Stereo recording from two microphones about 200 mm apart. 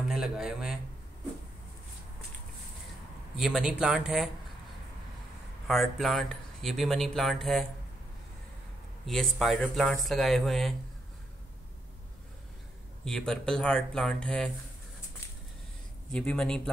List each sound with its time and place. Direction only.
0.1 s speech: centre (ahead or behind)
3.3 s speech: 5° right (ahead or behind)
5.7 s speech: centre (ahead or behind)
9.0 s speech: centre (ahead or behind)
13.0 s speech: 5° left (ahead or behind)
16.1 s speech: 5° left (ahead or behind)